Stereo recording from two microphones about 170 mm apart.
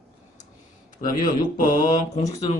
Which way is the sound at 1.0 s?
55° left (ahead or behind).